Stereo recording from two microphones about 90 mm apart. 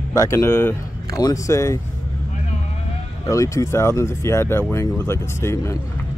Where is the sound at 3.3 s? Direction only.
35° left (ahead or behind).